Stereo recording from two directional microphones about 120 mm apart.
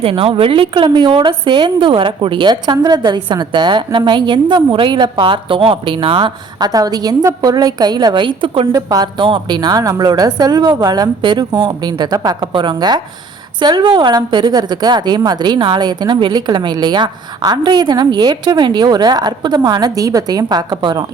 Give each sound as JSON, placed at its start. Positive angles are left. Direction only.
{"t": 0.0, "sound": "a woman's voice", "side_deg": -50}
{"t": 8.7, "sound": "a woman's voice", "side_deg": -35}